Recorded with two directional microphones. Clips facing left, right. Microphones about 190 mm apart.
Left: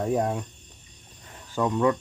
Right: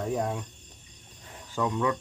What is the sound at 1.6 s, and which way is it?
Speech, 40° left (ahead or behind).